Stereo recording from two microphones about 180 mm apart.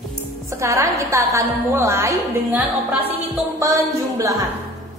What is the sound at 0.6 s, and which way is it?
A woman's voice, 15° right (ahead or behind).